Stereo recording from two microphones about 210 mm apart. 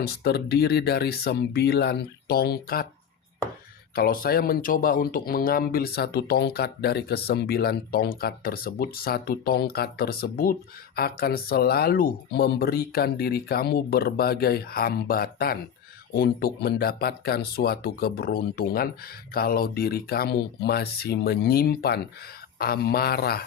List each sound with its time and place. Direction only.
0.0 s speech: 50° left (ahead or behind)
3.9 s speech: 45° left (ahead or behind)